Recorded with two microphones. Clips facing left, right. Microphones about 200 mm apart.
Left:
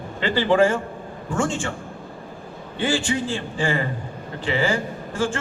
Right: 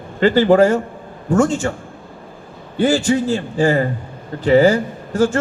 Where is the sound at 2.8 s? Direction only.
40° right (ahead or behind).